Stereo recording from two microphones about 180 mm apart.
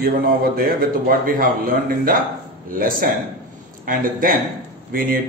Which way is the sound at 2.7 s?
50° right (ahead or behind).